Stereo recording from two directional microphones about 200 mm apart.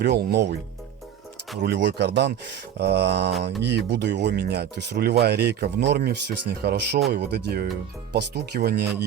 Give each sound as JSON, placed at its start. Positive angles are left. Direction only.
{"t": 0.0, "sound": "speech", "side_deg": -55}
{"t": 1.6, "sound": "speech", "side_deg": -60}